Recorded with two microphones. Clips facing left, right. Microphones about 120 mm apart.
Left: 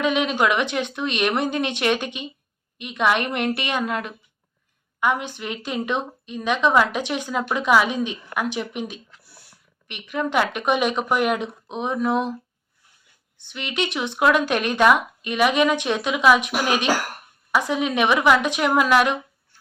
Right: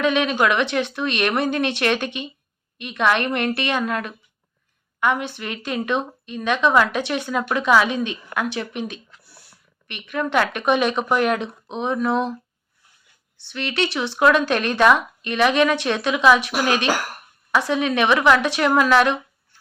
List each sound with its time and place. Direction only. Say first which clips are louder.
0.0 s a woman's voice: right 1 dB; 15° left (ahead or behind)
13.5 s a woman's voice: right 2 dB; 15° left (ahead or behind)